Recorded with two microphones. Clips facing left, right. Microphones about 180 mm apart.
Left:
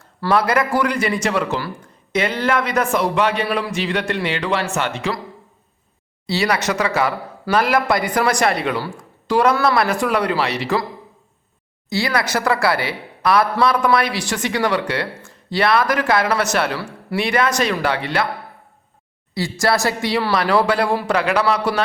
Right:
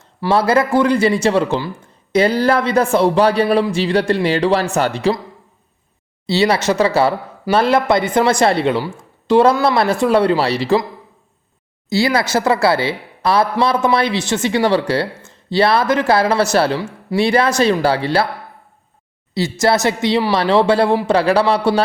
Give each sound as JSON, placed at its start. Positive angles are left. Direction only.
{"t": 0.3, "sound": "a woman's voice", "side_deg": -30}
{"t": 6.2, "sound": "a woman's voice", "side_deg": -25}
{"t": 11.9, "sound": "a woman's voice", "side_deg": -25}
{"t": 19.3, "sound": "a woman's voice", "side_deg": -20}